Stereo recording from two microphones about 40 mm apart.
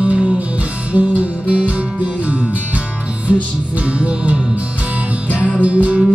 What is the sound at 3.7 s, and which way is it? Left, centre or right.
Music, right.